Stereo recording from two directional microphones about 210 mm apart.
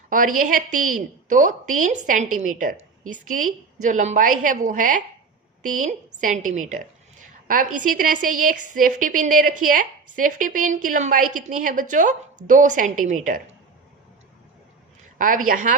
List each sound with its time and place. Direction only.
0.1 s a woman's voice: 40° right (ahead or behind)
15.4 s a woman's voice: 40° right (ahead or behind)